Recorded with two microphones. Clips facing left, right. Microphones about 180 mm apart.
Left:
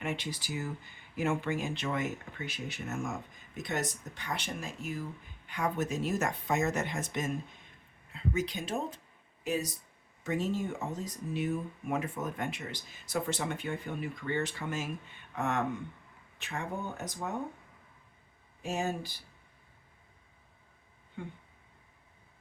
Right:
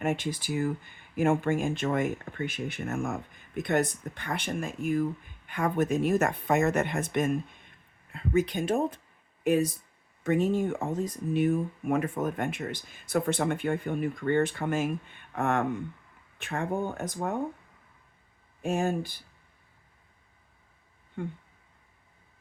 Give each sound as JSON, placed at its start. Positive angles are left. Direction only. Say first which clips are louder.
{"t": 0.0, "sound": "speech", "louder": "right 7 dB", "side_deg": -50}
{"t": 18.6, "sound": "speech", "louder": "right 6 dB", "side_deg": -55}
{"t": 21.2, "sound": "speech", "louder": "right 7 dB", "side_deg": -50}